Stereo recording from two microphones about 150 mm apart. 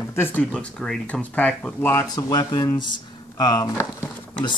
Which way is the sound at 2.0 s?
25° left (ahead or behind).